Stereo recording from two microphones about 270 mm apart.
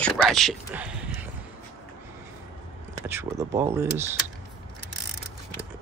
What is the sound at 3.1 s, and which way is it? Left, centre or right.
Speech, centre.